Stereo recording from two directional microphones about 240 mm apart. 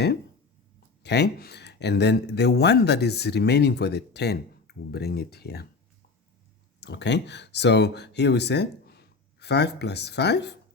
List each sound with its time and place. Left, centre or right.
1.0 s speech: left
6.7 s speech: left